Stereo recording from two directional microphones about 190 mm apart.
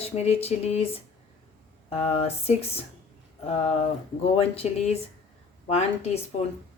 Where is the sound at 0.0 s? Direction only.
30° left (ahead or behind).